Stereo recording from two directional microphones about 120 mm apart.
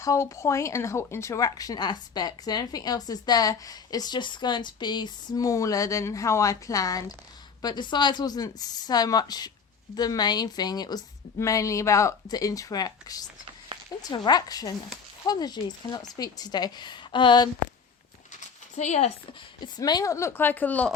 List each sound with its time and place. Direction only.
0.0 s speech: 25° left (ahead or behind)
18.8 s speech: 75° left (ahead or behind)
19.6 s speech: 35° left (ahead or behind); by 20.9 s 15° left (ahead or behind)